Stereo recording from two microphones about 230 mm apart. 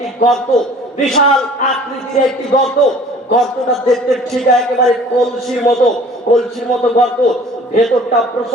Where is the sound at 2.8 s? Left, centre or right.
Centre.